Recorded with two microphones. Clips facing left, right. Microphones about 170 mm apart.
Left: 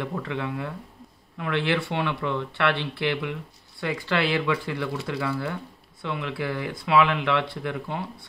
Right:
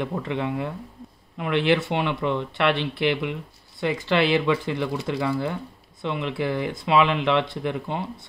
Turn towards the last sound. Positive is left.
turn(degrees=-20)  # may be behind; listen again after turning